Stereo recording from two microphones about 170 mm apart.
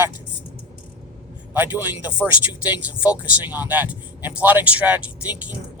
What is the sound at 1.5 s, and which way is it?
Speech, 10° right (ahead or behind).